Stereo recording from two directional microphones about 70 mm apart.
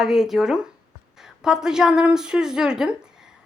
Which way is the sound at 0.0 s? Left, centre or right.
Centre.